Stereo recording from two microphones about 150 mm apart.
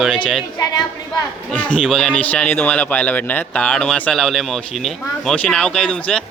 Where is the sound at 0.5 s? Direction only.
25° left (ahead or behind).